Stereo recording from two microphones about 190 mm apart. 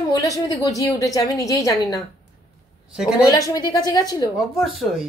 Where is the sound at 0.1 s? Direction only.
20° left (ahead or behind).